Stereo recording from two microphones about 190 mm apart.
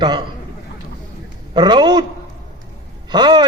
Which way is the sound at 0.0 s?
25° right (ahead or behind).